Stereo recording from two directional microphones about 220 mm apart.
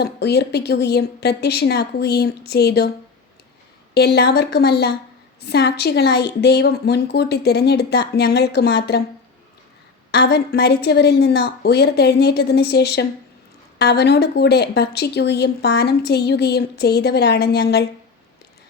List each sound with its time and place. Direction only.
0.0 s a woman's voice: 50° left (ahead or behind)
3.9 s a woman's voice: 50° left (ahead or behind)
10.1 s a woman's voice: 45° left (ahead or behind)